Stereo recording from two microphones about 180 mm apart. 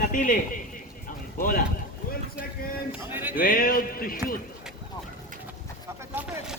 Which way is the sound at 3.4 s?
50° left (ahead or behind).